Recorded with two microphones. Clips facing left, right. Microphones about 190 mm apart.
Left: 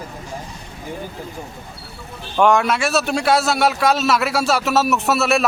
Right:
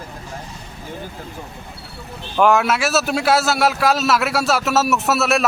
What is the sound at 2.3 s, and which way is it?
A man's voice, 5° right (ahead or behind).